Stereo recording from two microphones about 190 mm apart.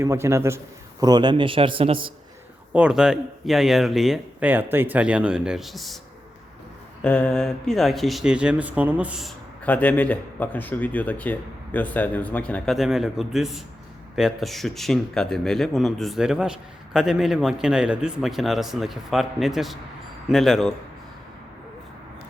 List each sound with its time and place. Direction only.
0.0 s a man's voice: 15° right (ahead or behind)
2.7 s speech: 5° right (ahead or behind)
7.0 s speech: 5° left (ahead or behind)
9.6 s speech: 10° left (ahead or behind)